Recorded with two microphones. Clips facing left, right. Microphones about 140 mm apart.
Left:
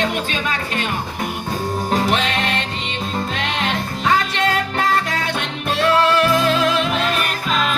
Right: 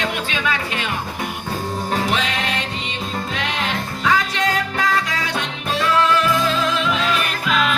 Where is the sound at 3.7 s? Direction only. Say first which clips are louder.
Left 1 dB; 60° left (ahead or behind); by 7.8 s 40° left (ahead or behind).